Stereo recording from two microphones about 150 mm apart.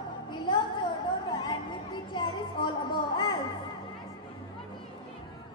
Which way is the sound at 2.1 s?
30° left (ahead or behind).